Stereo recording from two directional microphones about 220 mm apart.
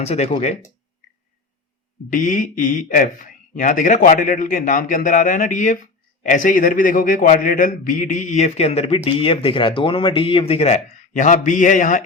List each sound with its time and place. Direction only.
0.0 s speech: 30° left (ahead or behind)
2.0 s speech: 35° left (ahead or behind)